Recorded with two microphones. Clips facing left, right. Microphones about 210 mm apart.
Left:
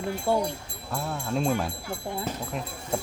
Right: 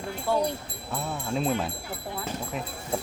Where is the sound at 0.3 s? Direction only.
25° left (ahead or behind).